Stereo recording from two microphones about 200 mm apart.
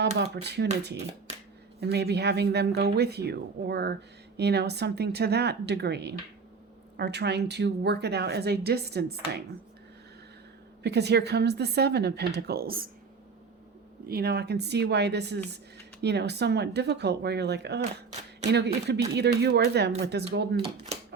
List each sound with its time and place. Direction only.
0.2 s a woman's voice: 55° right (ahead or behind)
1.8 s a woman's voice: 55° right (ahead or behind)
10.8 s a woman's voice: 55° right (ahead or behind)
14.1 s a woman's voice: 50° right (ahead or behind)